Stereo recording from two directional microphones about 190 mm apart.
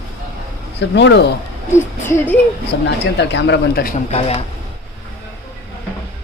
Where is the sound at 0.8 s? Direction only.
65° left (ahead or behind).